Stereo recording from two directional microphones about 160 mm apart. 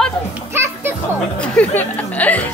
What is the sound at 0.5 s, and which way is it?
Music, 15° right (ahead or behind).